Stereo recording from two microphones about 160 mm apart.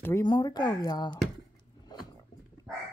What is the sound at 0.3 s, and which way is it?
Speech, 25° left (ahead or behind).